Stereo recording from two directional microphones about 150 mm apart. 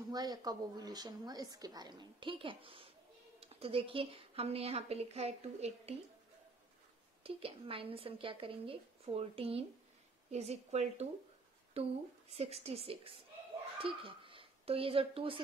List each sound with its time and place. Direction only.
0.1 s a woman's voice: 25° right (ahead or behind); by 5.9 s 45° right (ahead or behind)
7.2 s a woman's voice: 40° right (ahead or behind)